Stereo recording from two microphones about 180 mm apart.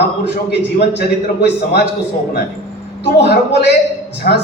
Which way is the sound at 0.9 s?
65° left (ahead or behind).